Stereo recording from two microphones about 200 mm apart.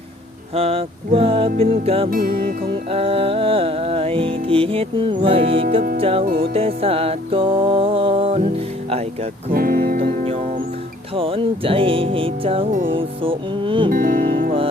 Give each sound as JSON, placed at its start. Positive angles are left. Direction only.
{"t": 0.5, "sound": "music", "side_deg": -30}
{"t": 2.0, "sound": "speech", "side_deg": -45}
{"t": 2.9, "sound": "music", "side_deg": -30}
{"t": 9.5, "sound": "speech", "side_deg": -45}
{"t": 10.0, "sound": "music", "side_deg": -30}
{"t": 13.9, "sound": "speech", "side_deg": -45}